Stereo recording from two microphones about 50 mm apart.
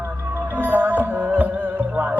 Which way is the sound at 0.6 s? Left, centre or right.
Right.